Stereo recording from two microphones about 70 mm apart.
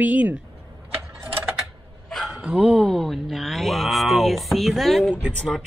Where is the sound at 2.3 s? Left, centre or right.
Centre.